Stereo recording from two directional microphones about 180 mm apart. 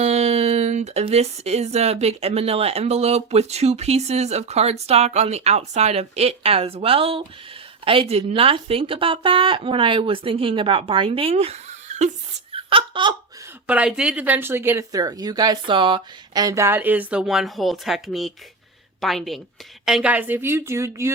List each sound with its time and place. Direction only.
0.0 s a woman's voice: 35° right (ahead or behind)
13.7 s a woman's voice: 5° right (ahead or behind)